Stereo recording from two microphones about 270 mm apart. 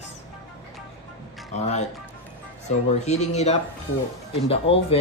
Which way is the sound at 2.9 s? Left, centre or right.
Left.